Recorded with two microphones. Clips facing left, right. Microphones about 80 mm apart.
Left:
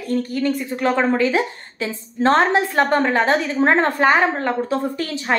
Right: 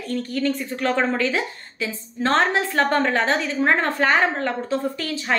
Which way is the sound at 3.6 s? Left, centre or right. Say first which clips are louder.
Left 4 dB; left.